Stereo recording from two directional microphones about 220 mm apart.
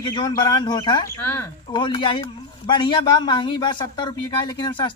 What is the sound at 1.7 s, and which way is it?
A man's voice, 20° left (ahead or behind).